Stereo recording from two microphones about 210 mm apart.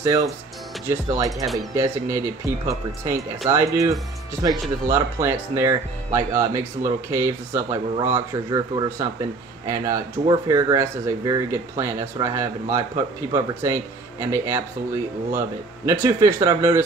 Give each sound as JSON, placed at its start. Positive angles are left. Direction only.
{"t": 0.0, "sound": "speech", "side_deg": -15}
{"t": 4.9, "sound": "speech", "side_deg": -10}